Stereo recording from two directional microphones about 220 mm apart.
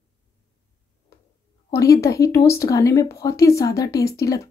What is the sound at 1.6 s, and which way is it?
Speech, 15° left (ahead or behind).